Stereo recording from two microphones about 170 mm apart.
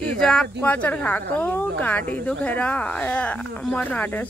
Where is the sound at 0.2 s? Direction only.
5° left (ahead or behind).